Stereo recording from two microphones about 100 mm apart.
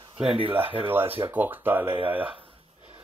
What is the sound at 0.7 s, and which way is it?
Speech, 20° right (ahead or behind).